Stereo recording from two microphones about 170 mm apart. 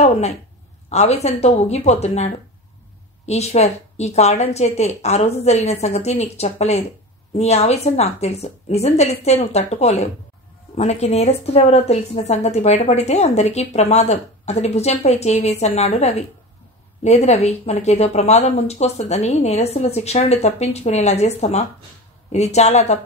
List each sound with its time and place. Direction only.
0.8 s a woman's voice: 40° left (ahead or behind)